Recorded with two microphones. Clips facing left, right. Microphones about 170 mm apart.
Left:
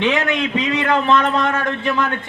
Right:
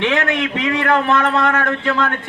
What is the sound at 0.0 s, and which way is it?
A man's voice, 20° left (ahead or behind).